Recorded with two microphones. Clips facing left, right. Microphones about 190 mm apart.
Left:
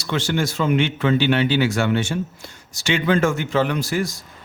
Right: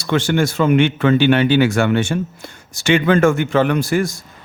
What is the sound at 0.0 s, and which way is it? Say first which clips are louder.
A man's voice: right 5 dB; 55° right (ahead or behind).